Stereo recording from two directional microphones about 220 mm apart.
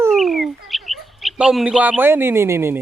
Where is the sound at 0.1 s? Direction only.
Centre (ahead or behind).